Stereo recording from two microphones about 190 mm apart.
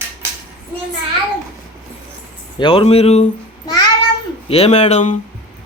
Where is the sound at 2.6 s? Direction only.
30° left (ahead or behind).